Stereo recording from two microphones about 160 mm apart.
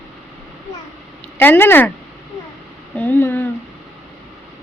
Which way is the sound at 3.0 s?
10° left (ahead or behind).